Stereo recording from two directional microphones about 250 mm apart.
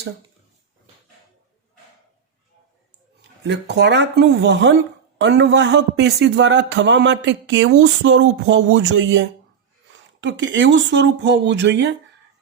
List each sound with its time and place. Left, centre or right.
3.2 s a man's voice: right